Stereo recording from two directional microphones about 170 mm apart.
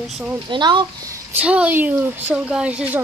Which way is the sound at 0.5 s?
30° right (ahead or behind).